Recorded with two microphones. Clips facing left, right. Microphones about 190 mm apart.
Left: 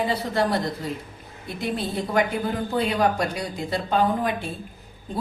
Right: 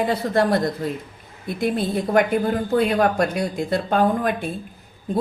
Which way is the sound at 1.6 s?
50° right (ahead or behind).